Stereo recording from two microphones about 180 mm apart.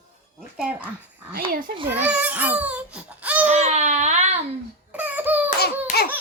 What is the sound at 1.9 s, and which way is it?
Baby cry, 10° right (ahead or behind).